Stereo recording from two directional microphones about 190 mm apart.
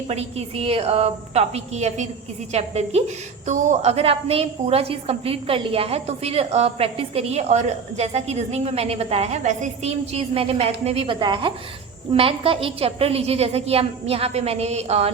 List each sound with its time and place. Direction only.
0.1 s a woman's voice: 35° right (ahead or behind)